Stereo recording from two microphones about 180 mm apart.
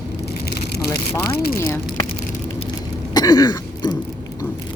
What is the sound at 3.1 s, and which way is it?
Throat clearing, 20° left (ahead or behind).